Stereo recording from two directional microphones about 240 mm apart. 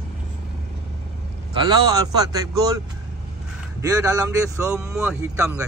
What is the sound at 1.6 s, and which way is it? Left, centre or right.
Speech, centre.